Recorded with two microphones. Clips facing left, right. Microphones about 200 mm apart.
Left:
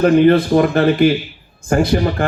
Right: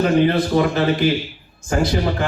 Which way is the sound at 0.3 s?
55° left (ahead or behind).